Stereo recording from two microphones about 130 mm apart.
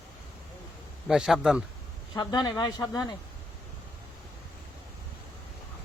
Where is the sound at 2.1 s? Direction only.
35° left (ahead or behind).